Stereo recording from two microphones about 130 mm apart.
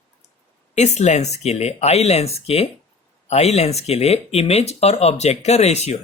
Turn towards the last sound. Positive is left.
turn(degrees=55)  # may be behind; listen again after turning